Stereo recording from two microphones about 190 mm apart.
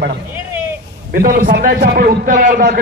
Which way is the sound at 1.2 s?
50° right (ahead or behind).